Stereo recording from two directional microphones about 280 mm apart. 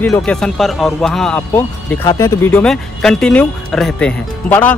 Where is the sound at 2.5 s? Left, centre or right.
Centre.